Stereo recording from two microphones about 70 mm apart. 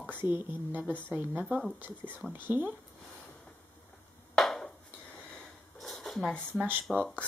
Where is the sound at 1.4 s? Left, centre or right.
Centre.